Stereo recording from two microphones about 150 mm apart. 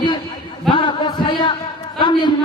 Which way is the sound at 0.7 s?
35° left (ahead or behind).